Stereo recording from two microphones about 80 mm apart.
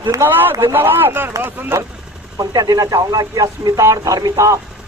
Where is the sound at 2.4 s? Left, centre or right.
Right.